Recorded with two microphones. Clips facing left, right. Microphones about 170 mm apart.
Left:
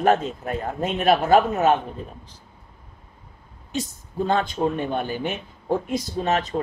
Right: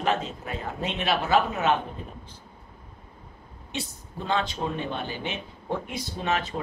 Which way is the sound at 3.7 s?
45° left (ahead or behind).